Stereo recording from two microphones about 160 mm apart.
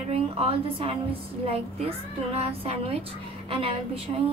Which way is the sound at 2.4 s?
40° right (ahead or behind).